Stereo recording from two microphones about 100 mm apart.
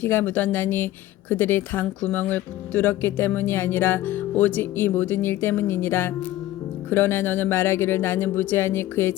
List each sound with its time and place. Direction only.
0.0 s speech: 20° left (ahead or behind)